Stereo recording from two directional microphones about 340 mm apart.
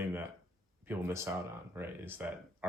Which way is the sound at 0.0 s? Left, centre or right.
Centre.